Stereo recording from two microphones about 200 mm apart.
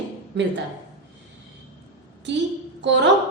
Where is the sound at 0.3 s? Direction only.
60° right (ahead or behind).